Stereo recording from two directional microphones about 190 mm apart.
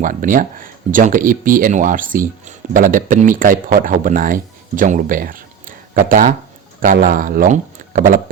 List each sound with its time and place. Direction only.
0.0 s speech: 45° right (ahead or behind)